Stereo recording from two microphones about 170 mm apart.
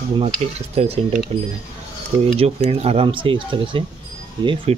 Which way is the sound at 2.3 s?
35° right (ahead or behind).